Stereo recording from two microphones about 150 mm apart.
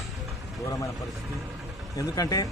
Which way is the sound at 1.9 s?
20° left (ahead or behind).